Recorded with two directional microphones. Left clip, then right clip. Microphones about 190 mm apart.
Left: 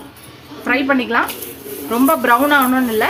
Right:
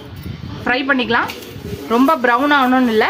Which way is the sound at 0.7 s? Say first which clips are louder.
Even; 25° right (ahead or behind).